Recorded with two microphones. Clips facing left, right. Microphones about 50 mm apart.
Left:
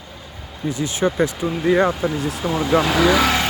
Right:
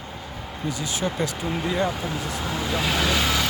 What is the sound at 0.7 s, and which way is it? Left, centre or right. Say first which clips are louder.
Speech: left 8 dB; left.